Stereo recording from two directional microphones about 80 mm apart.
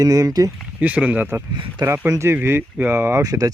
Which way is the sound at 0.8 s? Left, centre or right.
Centre.